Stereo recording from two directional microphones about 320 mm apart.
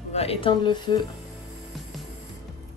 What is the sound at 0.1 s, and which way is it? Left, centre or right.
Speech, centre.